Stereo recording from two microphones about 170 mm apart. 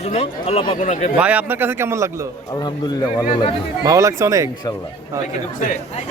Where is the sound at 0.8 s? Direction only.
45° left (ahead or behind).